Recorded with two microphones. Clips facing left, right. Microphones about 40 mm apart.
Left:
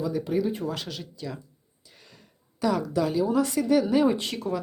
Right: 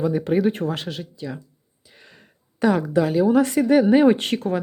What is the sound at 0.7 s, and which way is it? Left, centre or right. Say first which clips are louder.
Speech: right 5 dB; right.